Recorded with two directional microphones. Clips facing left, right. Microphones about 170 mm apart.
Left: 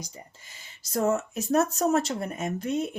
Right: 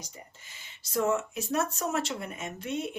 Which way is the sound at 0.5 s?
40° left (ahead or behind).